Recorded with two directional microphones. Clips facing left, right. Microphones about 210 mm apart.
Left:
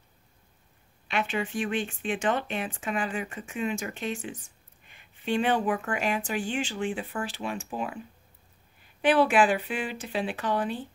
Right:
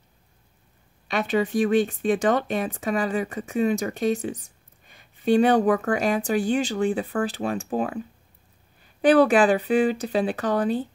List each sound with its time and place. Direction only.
1.0 s speech: 40° right (ahead or behind)
9.0 s speech: 40° right (ahead or behind)